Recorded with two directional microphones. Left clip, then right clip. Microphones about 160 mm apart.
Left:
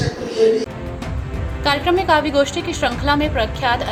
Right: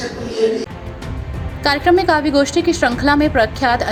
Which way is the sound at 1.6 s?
35° right (ahead or behind).